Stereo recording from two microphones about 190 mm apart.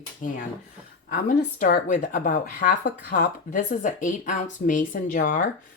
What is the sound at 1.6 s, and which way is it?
Speech, 40° left (ahead or behind).